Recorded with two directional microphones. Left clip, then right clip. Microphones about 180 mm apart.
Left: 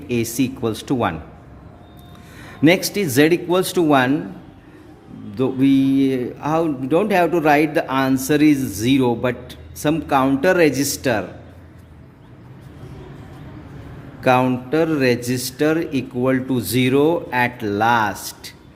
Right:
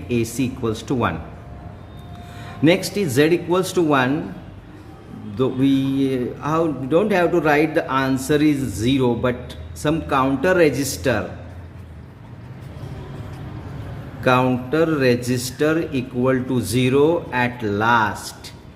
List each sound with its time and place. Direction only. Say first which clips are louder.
0.1 s a man's voice: left 1 dB; 40° left (ahead or behind)
2.4 s a man's voice: left 2 dB; 35° left (ahead or behind)
5.4 s a man's voice: left 2 dB; 35° left (ahead or behind)
14.2 s a man's voice: left 1 dB; 35° left (ahead or behind)